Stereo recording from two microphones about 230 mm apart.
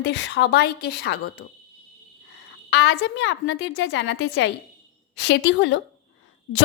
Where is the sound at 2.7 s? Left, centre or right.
Left.